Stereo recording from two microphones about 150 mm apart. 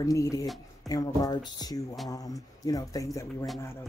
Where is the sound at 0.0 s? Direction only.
20° left (ahead or behind).